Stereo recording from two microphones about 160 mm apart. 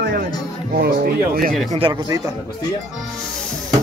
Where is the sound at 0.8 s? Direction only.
70° right (ahead or behind).